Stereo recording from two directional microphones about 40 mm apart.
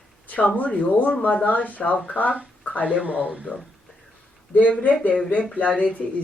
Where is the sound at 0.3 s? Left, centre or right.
Left.